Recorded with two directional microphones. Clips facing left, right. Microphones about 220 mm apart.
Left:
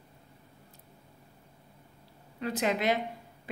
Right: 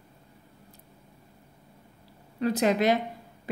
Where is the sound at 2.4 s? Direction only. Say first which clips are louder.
Right 6 dB; 40° right (ahead or behind).